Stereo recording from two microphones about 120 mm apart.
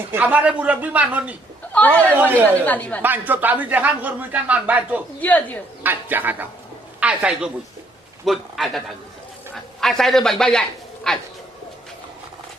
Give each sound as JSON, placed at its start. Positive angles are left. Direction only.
{"t": 0.1, "sound": "speech", "side_deg": -15}
{"t": 1.7, "sound": "a man's voice", "side_deg": 10}
{"t": 3.0, "sound": "speech", "side_deg": -15}
{"t": 5.2, "sound": "speech", "side_deg": 15}
{"t": 5.8, "sound": "a woman's voice", "side_deg": -15}
{"t": 9.8, "sound": "a man's voice", "side_deg": 5}